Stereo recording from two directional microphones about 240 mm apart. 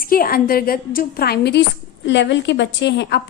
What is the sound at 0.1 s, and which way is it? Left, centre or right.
A woman's voice, left.